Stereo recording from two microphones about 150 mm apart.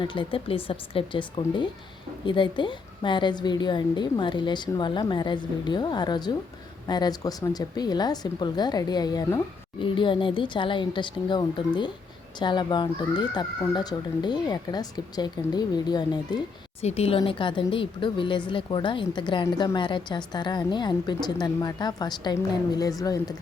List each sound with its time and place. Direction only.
0.0 s a woman's voice: 35° left (ahead or behind)
16.8 s a woman's voice: 45° left (ahead or behind)
17.2 s a woman's voice: 35° left (ahead or behind)